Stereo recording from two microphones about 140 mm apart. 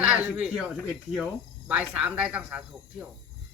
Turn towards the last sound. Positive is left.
turn(degrees=-10)  # may be behind; listen again after turning